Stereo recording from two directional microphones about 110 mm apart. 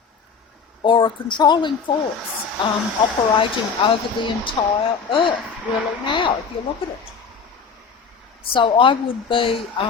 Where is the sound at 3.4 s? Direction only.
50° left (ahead or behind).